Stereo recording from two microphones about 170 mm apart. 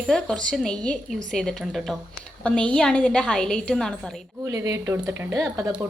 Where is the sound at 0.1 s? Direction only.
5° left (ahead or behind).